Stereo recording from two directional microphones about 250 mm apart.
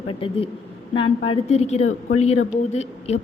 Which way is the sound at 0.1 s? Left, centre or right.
Left.